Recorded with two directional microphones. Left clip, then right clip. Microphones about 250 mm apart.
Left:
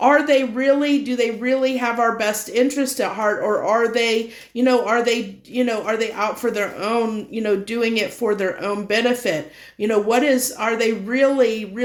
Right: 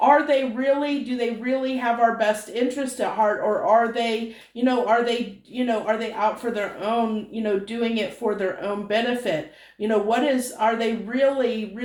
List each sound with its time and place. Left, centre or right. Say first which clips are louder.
0.0 s speech: left 2 dB; left